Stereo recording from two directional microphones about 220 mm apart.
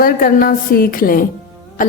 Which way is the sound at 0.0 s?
40° left (ahead or behind).